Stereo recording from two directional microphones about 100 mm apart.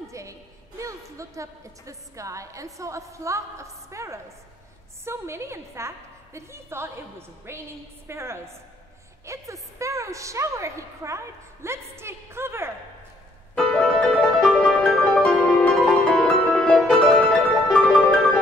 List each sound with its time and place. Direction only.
0.1 s a woman's voice: 30° right (ahead or behind)
13.6 s music: 10° left (ahead or behind)